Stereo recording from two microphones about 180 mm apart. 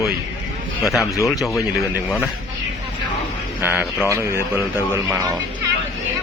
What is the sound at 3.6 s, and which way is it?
Speech, 10° right (ahead or behind).